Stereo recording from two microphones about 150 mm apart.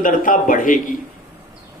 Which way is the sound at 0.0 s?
65° left (ahead or behind).